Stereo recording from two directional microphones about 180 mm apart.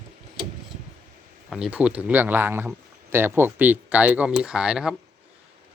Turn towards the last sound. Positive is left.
turn(degrees=-5)  # may be behind; listen again after turning